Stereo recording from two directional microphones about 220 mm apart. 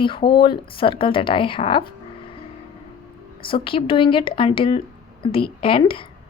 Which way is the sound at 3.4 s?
25° left (ahead or behind).